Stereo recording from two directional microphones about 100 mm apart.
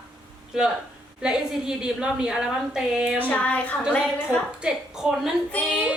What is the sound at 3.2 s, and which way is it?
Speech, 15° left (ahead or behind).